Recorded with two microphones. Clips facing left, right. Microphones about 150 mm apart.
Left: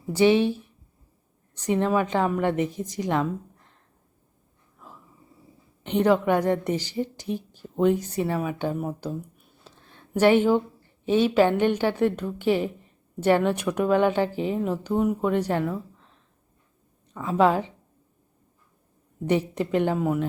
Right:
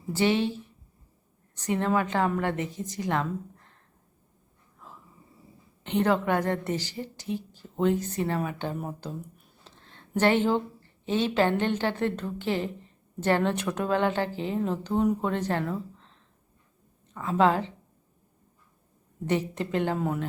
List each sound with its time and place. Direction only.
0.1 s a woman's voice: 15° left (ahead or behind)
1.6 s a woman's voice: 15° left (ahead or behind)
5.8 s a woman's voice: 15° left (ahead or behind)
9.6 s a sound: 10° left (ahead or behind)
11.0 s a woman's voice: 10° left (ahead or behind)
17.2 s a woman's voice: 15° left (ahead or behind)
19.5 s a woman's voice: 15° left (ahead or behind)